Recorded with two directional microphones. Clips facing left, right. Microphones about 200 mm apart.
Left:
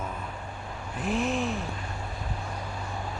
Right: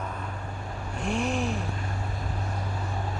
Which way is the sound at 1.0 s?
Centre (ahead or behind).